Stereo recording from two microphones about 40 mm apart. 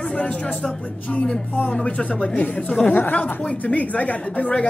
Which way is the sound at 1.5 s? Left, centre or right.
Left.